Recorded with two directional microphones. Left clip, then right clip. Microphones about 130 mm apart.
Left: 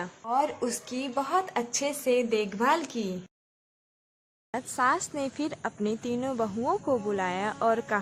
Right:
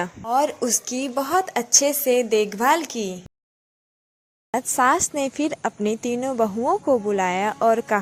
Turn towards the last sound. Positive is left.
turn(degrees=-35)  # may be behind; listen again after turning